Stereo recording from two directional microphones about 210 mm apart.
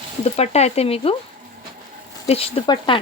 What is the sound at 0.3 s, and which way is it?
Speech, 30° left (ahead or behind).